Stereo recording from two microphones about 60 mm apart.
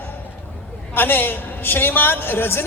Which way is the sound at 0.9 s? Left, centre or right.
Left.